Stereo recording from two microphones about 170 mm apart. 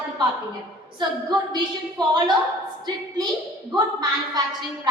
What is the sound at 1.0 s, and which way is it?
A woman's voice, 25° right (ahead or behind).